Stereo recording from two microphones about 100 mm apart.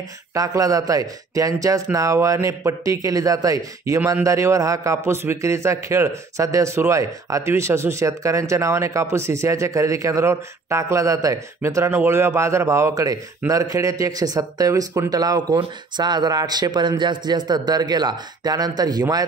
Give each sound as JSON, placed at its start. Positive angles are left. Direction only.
{"t": 0.3, "sound": "speech", "side_deg": -35}